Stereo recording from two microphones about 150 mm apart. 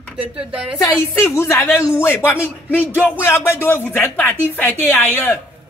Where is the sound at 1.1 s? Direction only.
15° left (ahead or behind).